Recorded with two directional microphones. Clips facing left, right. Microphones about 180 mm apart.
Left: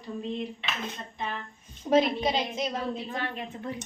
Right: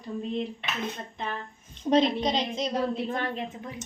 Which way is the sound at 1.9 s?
5° left (ahead or behind).